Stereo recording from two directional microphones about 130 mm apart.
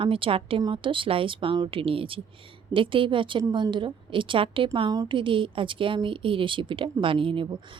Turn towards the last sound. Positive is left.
turn(degrees=-40)  # may be behind; listen again after turning